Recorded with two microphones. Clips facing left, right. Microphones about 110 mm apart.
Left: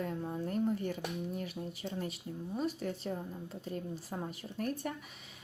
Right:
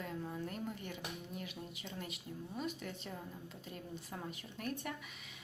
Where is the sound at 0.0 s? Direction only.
35° left (ahead or behind).